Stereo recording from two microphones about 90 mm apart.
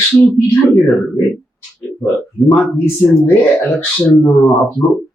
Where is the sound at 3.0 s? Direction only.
20° left (ahead or behind).